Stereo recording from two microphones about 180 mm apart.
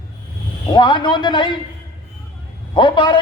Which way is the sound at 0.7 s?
25° left (ahead or behind).